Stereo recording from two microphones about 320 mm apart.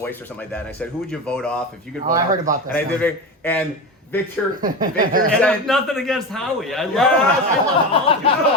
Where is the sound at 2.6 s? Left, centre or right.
Centre.